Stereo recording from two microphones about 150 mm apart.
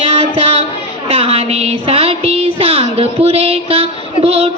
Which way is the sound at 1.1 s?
45° right (ahead or behind).